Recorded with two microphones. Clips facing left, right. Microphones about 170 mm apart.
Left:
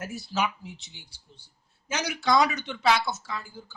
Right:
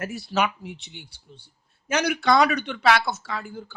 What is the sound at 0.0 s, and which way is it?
Speech, 65° right (ahead or behind).